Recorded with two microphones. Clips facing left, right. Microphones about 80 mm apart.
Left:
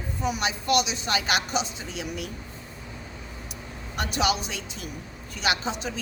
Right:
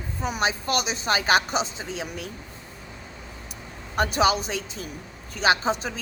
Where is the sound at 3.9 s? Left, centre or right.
Right.